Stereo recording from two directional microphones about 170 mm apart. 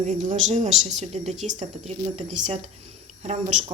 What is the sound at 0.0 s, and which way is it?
Speech, 45° right (ahead or behind).